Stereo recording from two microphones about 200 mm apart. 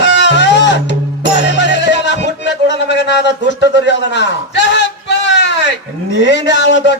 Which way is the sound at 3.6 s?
60° left (ahead or behind).